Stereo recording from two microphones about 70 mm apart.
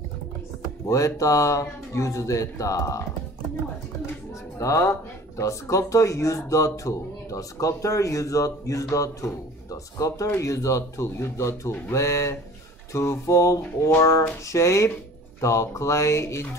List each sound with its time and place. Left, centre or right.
0.8 s speech: left
4.6 s speech: left